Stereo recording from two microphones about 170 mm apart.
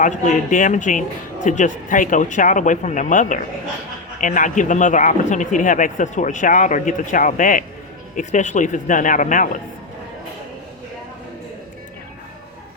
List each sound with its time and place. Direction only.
0.0 s speech: 45° left (ahead or behind)